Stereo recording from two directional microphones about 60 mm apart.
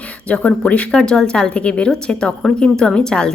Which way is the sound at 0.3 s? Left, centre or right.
Centre.